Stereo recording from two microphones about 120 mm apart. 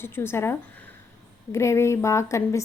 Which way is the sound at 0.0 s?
20° left (ahead or behind).